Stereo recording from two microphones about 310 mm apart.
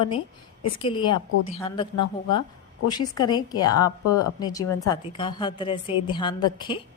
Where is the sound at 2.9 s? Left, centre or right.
Centre.